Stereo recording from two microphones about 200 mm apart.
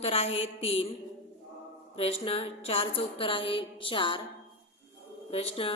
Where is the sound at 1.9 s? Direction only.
30° left (ahead or behind).